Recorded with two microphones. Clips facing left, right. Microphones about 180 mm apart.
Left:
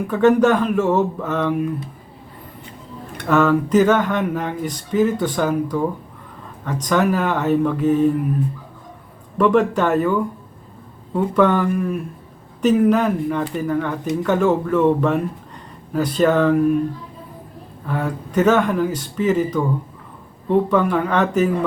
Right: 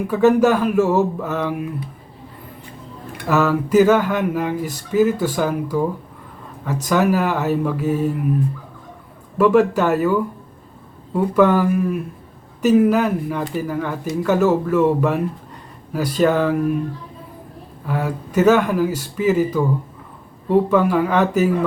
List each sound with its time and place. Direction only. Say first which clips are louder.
0.1 s speech: even; 5° right (ahead or behind)
3.2 s speech: left 2 dB; 5° right (ahead or behind)
9.4 s speech: right 1 dB; 5° right (ahead or behind)
17.8 s speech: right 1 dB; 5° right (ahead or behind)